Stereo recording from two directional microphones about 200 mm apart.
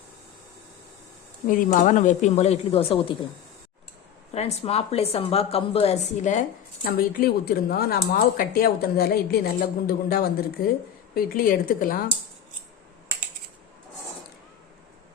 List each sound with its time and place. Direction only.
1.5 s a woman's voice: 40° left (ahead or behind)
4.4 s a woman's voice: 30° left (ahead or behind)
6.8 s speech: 50° left (ahead or behind)